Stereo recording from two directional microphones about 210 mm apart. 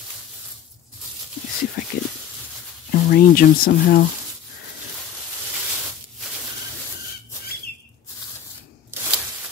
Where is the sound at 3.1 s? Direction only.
45° left (ahead or behind).